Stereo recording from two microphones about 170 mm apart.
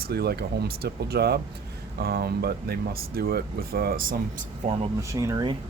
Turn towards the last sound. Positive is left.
turn(degrees=-20)  # may be behind; listen again after turning